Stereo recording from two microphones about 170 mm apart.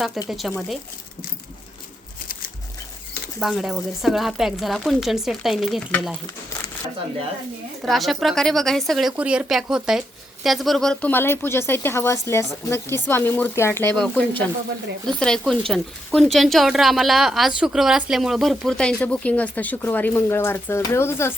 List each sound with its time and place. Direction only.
0.3 s speech: centre (ahead or behind)
3.4 s speech: centre (ahead or behind)
7.8 s a woman's voice: centre (ahead or behind)